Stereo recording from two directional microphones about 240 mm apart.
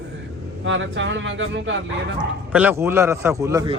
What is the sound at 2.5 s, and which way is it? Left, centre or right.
A man's voice, centre.